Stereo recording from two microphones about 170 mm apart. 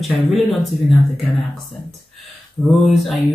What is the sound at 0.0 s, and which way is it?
Speech, centre (ahead or behind).